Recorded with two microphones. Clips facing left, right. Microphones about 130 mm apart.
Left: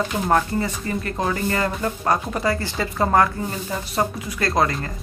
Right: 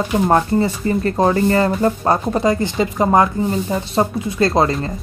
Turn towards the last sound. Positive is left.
turn(degrees=-25)  # may be behind; listen again after turning